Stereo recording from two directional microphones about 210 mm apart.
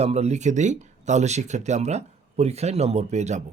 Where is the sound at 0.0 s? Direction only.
30° right (ahead or behind).